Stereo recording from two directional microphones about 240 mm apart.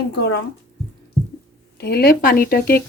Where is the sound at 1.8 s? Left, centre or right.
Left.